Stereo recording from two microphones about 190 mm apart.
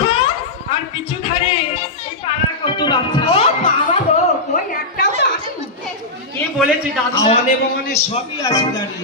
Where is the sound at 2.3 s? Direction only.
30° left (ahead or behind).